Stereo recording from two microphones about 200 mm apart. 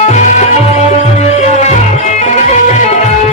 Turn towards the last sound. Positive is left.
turn(degrees=35)  # may be behind; listen again after turning